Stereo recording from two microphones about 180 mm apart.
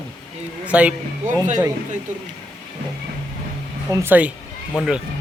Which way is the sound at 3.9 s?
10° right (ahead or behind).